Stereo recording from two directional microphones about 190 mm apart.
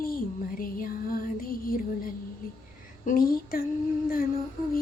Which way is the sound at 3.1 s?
50° left (ahead or behind).